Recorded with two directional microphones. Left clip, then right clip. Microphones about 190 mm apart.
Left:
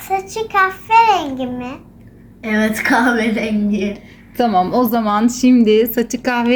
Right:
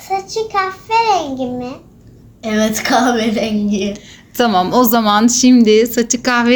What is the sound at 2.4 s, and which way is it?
A woman's voice, 55° right (ahead or behind).